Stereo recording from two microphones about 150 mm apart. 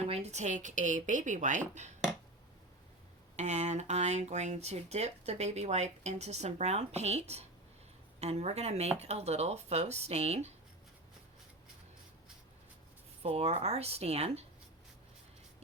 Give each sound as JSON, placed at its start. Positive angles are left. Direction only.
{"t": 0.0, "sound": "speech", "side_deg": -45}
{"t": 3.3, "sound": "speech", "side_deg": -50}
{"t": 13.2, "sound": "speech", "side_deg": -45}